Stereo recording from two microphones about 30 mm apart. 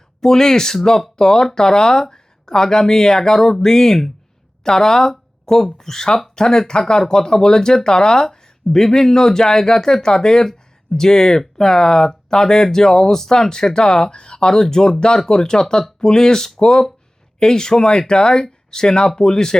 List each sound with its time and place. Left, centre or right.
0.2 s speech: centre